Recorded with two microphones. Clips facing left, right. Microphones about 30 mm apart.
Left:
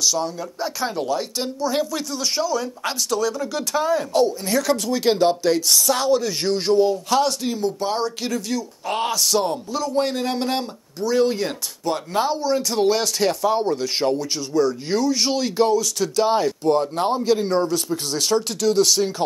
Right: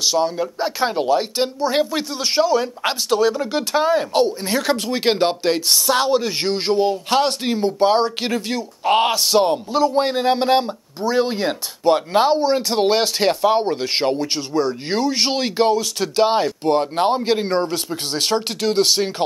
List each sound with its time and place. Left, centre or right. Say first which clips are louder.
0.0 s speech: right 4 dB; right